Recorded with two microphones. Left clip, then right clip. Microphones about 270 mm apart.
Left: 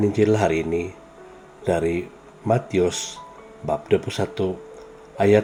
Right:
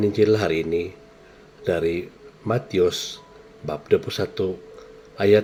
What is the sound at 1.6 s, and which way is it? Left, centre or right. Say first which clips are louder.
Speech: left 1 dB; centre.